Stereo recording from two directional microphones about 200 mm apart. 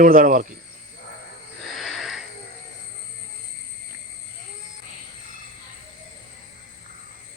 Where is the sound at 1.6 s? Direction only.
Centre (ahead or behind).